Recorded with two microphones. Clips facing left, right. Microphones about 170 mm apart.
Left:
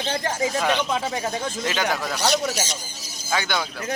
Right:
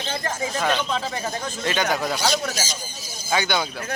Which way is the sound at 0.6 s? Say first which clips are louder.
Left 1 dB; 10° left (ahead or behind).